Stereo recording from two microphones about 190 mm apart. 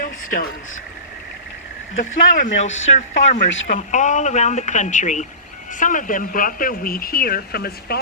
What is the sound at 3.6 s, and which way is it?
Speech, 40° left (ahead or behind).